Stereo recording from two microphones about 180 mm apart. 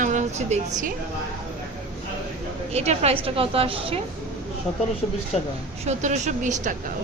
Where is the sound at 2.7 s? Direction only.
35° right (ahead or behind).